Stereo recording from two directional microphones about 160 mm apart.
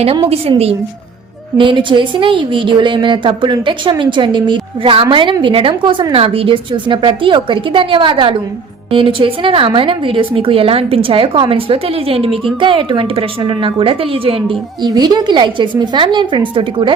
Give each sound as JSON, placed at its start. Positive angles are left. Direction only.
{"t": 1.5, "sound": "a woman's voice", "side_deg": -30}